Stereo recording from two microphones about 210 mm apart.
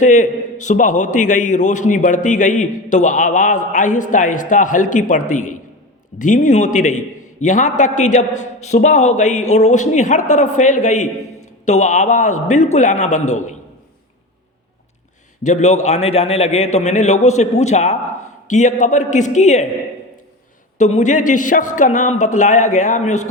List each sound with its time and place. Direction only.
0.0 s a man's voice: 35° left (ahead or behind)
15.4 s a man's voice: 35° left (ahead or behind)
20.7 s a man's voice: 35° left (ahead or behind)